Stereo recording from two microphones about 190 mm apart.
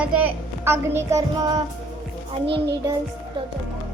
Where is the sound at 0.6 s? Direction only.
15° right (ahead or behind).